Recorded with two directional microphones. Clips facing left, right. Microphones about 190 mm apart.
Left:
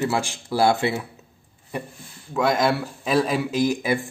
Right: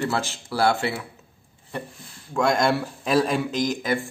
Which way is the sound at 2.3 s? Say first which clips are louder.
Even; centre (ahead or behind).